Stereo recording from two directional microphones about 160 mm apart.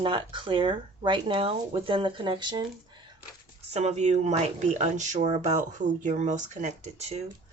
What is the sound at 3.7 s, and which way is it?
Speech, 45° right (ahead or behind).